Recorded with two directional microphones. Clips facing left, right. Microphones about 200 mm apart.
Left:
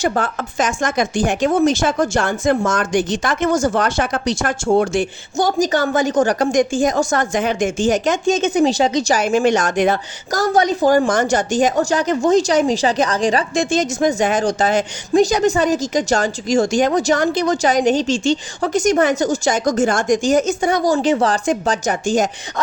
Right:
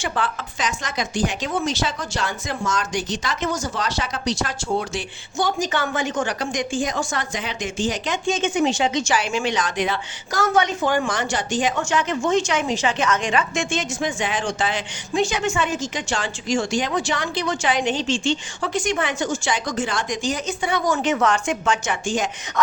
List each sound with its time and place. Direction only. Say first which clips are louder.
0.0 s speech: left 6 dB; 45° left (ahead or behind)